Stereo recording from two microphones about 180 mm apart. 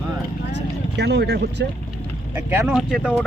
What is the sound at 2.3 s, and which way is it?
Speech, 10° right (ahead or behind).